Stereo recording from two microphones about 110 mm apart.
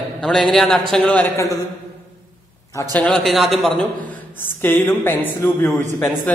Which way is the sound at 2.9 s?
5° left (ahead or behind).